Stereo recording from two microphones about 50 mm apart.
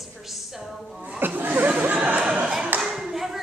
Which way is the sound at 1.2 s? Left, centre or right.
Right.